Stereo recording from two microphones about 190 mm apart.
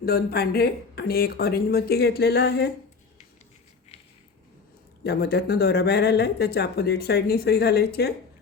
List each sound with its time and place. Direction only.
0.0 s speech: 55° left (ahead or behind)
5.0 s speech: 55° left (ahead or behind)